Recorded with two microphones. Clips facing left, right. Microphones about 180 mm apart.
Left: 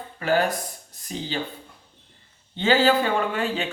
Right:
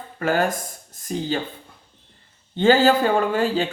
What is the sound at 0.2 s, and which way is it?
Speech, 45° right (ahead or behind).